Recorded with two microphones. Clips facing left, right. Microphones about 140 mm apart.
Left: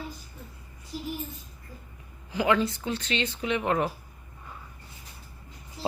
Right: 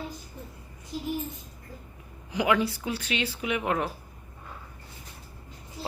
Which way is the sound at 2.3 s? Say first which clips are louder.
Even; 15° right (ahead or behind).